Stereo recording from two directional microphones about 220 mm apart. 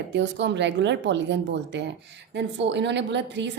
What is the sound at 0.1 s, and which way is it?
Speech, 55° right (ahead or behind).